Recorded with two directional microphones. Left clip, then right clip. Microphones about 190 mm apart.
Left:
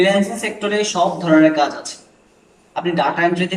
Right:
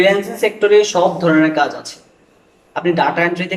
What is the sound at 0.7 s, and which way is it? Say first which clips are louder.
Speech: right 4 dB; 45° right (ahead or behind).